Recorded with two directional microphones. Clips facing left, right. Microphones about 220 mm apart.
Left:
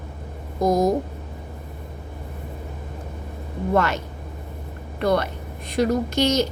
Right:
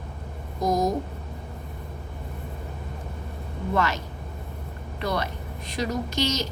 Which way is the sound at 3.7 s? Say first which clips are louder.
Left 4 dB; 55° left (ahead or behind).